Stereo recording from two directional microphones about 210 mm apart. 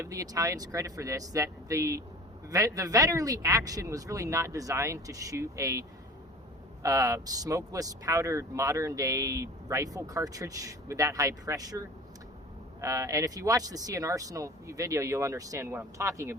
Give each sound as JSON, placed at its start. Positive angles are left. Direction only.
{"t": 0.0, "sound": "speech", "side_deg": -15}
{"t": 6.8, "sound": "speech", "side_deg": -15}